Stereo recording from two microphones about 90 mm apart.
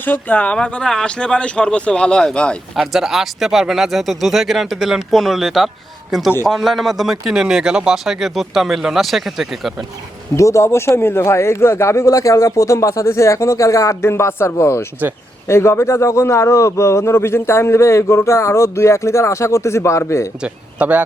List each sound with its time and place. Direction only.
0.0 s speech: 20° left (ahead or behind)
2.7 s speech: 5° right (ahead or behind)
10.3 s a man's voice: 35° left (ahead or behind)
20.4 s a man's voice: 15° right (ahead or behind)